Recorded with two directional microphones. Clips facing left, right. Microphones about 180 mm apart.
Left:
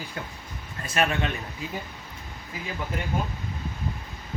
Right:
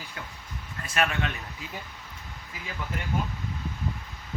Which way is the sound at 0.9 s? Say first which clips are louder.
Left 2 dB; 30° left (ahead or behind).